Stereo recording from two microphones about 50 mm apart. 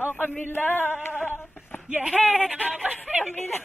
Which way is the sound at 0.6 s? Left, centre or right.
Left.